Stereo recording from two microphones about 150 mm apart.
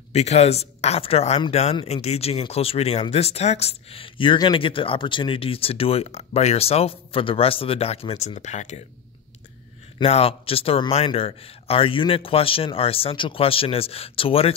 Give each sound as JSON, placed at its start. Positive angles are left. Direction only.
{"t": 0.1, "sound": "speech", "side_deg": 45}
{"t": 10.0, "sound": "speech", "side_deg": 40}